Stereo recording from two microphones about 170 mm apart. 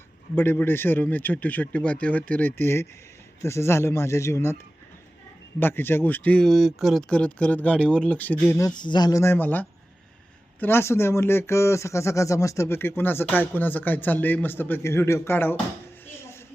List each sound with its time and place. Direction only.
0.3 s speech: 15° left (ahead or behind)
5.5 s speech: 10° left (ahead or behind)
16.0 s a sound: 15° left (ahead or behind)